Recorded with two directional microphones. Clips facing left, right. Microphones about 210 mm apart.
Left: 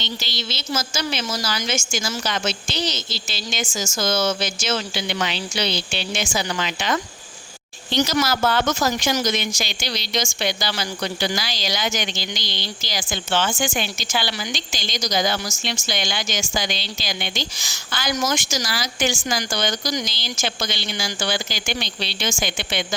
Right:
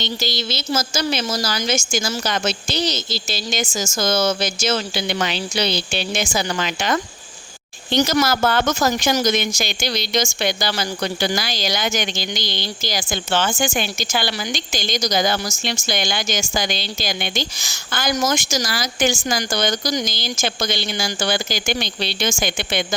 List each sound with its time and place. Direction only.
0.0 s a woman's voice: 40° right (ahead or behind)